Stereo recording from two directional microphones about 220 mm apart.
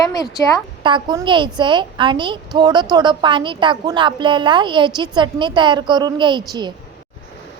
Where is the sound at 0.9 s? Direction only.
20° right (ahead or behind).